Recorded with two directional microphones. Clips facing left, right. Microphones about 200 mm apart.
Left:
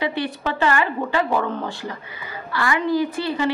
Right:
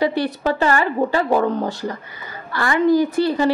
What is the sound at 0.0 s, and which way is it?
A woman's voice, 40° right (ahead or behind).